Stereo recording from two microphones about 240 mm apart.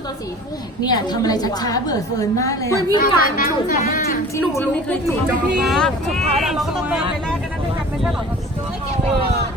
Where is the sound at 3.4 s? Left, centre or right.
Left.